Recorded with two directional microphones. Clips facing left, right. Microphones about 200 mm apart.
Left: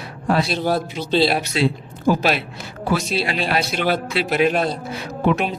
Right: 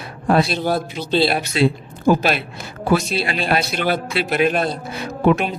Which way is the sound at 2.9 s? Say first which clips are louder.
Right 3 dB; 50° right (ahead or behind).